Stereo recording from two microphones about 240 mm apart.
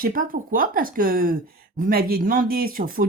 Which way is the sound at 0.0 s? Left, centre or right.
Right.